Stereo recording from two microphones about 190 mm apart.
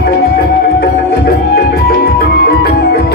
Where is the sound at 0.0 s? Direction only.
50° left (ahead or behind).